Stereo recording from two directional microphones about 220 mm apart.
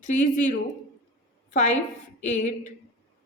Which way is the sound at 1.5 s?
35° left (ahead or behind).